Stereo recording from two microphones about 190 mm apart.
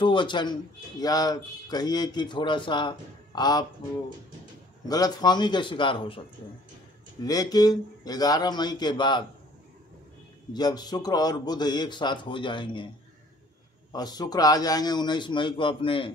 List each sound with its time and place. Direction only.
0.0 s a man's voice: 25° left (ahead or behind)
4.8 s a man's voice: 20° left (ahead or behind)
7.2 s a man's voice: 20° left (ahead or behind)
10.5 s a man's voice: 20° left (ahead or behind)
13.9 s a man's voice: 20° left (ahead or behind)